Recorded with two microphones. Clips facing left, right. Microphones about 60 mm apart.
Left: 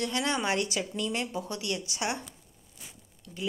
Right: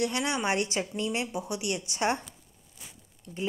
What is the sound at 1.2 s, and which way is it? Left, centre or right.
A woman's voice, centre.